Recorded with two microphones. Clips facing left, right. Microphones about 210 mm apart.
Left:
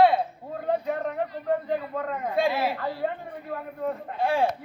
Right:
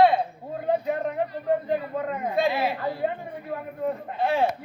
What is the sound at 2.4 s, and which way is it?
Speech, centre (ahead or behind).